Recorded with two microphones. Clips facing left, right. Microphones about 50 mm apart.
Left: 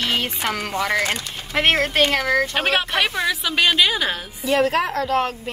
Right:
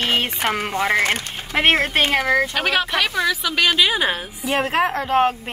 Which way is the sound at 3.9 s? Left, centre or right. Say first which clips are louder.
Right 2 dB; right.